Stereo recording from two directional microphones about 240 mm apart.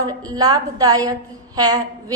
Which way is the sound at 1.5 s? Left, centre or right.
Centre.